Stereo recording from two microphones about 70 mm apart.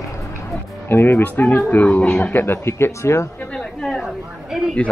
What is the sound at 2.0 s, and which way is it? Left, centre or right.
Speech, centre.